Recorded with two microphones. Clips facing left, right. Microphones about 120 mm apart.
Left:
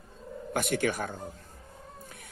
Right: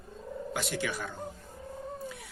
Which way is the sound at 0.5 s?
50° left (ahead or behind).